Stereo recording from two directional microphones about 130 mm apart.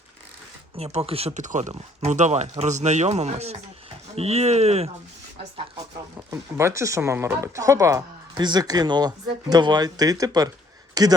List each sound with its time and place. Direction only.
0.9 s speech: 50° right (ahead or behind)
1.3 s speech: 70° right (ahead or behind)
6.1 s speech: 20° right (ahead or behind)